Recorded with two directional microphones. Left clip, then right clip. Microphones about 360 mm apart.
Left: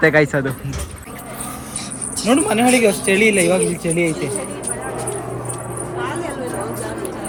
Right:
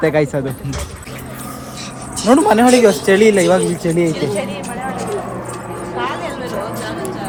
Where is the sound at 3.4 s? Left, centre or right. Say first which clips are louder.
Right 3 dB; right.